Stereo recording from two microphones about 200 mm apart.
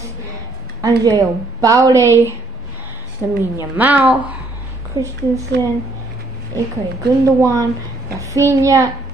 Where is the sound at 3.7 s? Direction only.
10° right (ahead or behind).